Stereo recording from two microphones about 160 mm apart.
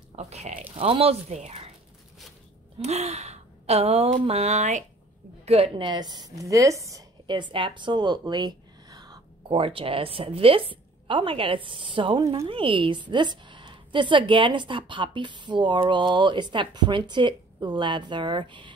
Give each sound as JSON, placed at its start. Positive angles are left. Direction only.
{"t": 0.1, "sound": "speech", "side_deg": -45}
{"t": 0.7, "sound": "gasp", "side_deg": -35}
{"t": 2.8, "sound": "gasp", "side_deg": -40}
{"t": 5.4, "sound": "a woman's voice", "side_deg": -40}